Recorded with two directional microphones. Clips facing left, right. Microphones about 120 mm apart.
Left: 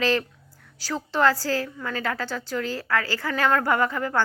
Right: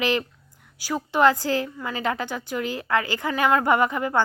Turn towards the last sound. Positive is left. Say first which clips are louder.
# right 2 dB
turn(degrees=-15)  # may be behind; listen again after turning